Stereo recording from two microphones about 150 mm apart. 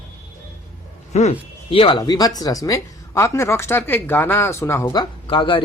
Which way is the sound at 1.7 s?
35° left (ahead or behind).